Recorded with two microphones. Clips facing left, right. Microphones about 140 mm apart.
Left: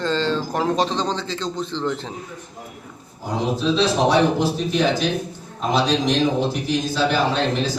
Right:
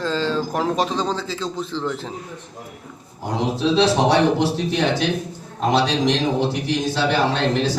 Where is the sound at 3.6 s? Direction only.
75° right (ahead or behind).